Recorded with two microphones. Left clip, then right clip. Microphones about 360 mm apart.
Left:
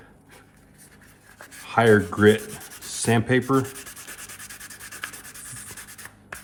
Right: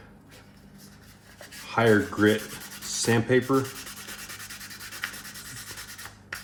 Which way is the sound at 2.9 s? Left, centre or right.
Left.